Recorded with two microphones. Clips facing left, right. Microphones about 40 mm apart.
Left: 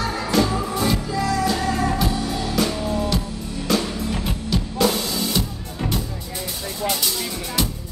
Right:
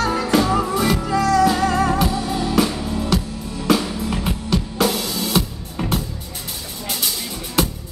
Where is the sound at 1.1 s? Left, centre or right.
Right.